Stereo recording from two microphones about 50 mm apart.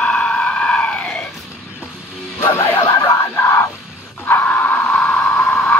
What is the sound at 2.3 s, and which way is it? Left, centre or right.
Music, left.